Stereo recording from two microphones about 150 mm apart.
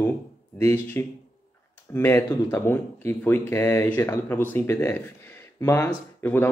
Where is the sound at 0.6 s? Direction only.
15° left (ahead or behind).